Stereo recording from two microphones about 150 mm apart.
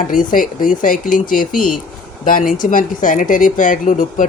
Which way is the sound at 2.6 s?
65° left (ahead or behind).